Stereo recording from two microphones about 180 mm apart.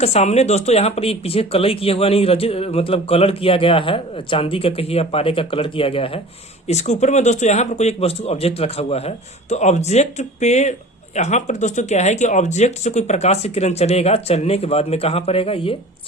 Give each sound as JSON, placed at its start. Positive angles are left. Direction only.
{"t": 0.0, "sound": "a man's voice", "side_deg": 35}